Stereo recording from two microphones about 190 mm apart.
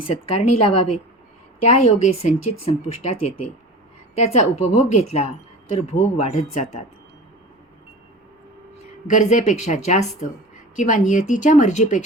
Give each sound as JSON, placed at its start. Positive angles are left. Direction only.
{"t": 0.3, "sound": "speech", "side_deg": 30}
{"t": 9.0, "sound": "speech", "side_deg": 40}